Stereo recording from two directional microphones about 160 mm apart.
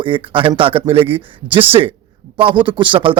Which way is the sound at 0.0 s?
30° right (ahead or behind).